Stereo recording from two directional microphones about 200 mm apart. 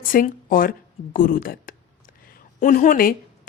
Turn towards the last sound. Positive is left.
turn(degrees=45)  # may be behind; listen again after turning